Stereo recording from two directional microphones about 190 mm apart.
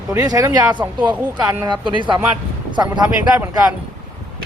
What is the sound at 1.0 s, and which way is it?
Speech, 25° right (ahead or behind).